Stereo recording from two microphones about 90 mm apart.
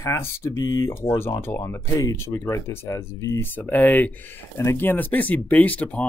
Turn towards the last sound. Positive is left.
turn(degrees=15)  # may be behind; listen again after turning